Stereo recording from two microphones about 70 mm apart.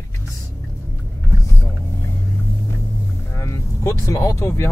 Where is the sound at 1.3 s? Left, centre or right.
Left.